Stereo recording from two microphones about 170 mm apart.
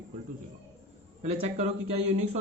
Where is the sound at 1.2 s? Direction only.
40° right (ahead or behind).